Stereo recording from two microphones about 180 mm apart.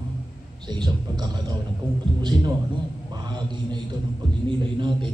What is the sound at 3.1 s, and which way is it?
A man's voice, 25° right (ahead or behind).